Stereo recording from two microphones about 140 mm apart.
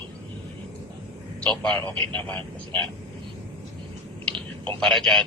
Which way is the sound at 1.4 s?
10° left (ahead or behind).